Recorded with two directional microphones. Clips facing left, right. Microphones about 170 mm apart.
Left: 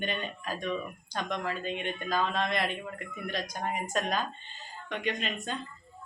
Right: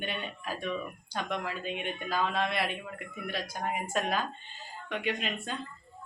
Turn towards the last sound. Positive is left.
turn(degrees=-5)  # may be behind; listen again after turning